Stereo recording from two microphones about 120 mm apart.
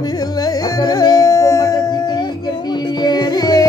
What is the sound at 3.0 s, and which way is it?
Music, 35° left (ahead or behind).